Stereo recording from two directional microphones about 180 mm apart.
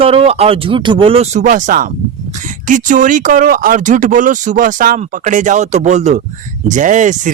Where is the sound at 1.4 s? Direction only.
45° right (ahead or behind).